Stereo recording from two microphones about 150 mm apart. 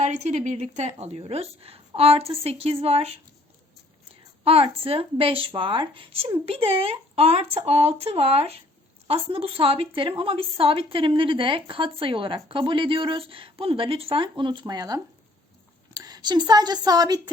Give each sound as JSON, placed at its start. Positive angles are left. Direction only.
{"t": 0.0, "sound": "a woman's voice", "side_deg": -50}